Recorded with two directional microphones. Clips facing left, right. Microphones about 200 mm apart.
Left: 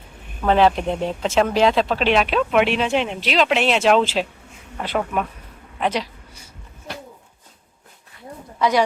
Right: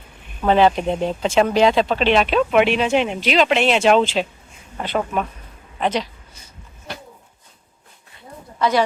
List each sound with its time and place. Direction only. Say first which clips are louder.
0.4 s speech: right 1 dB; centre (ahead or behind)
8.5 s speech: even; 15° left (ahead or behind)